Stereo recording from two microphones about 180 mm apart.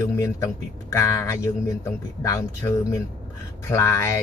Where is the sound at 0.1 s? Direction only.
15° left (ahead or behind).